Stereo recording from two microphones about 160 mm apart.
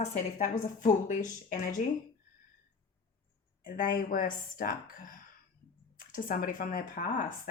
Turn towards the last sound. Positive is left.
turn(degrees=60)  # may be behind; listen again after turning